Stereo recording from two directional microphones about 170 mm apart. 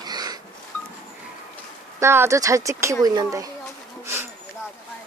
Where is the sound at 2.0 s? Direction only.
15° right (ahead or behind).